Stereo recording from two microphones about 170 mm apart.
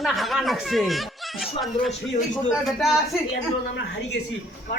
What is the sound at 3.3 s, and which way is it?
Speech, 90° left.